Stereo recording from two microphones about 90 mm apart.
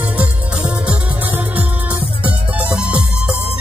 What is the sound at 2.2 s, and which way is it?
Music, 10° right (ahead or behind).